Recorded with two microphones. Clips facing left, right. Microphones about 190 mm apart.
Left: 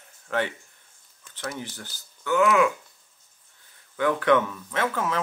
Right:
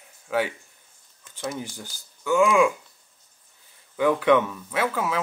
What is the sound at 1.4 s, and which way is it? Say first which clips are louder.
Speech: right 3 dB; 15° right (ahead or behind).